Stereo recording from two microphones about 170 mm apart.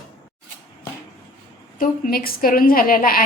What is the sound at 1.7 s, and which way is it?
A woman's voice, 55° left (ahead or behind).